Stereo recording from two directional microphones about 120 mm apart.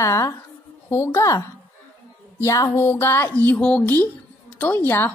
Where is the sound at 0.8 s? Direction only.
20° left (ahead or behind).